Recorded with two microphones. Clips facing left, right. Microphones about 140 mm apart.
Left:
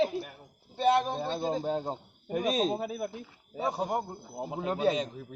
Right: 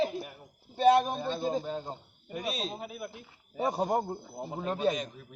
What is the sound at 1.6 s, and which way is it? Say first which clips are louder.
Speech: left 5 dB; 35° left (ahead or behind).